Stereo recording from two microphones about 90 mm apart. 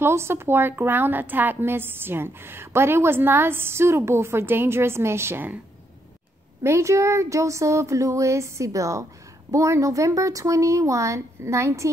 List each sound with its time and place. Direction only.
0.0 s a woman's voice: 30° right (ahead or behind)
6.6 s speech: 30° right (ahead or behind)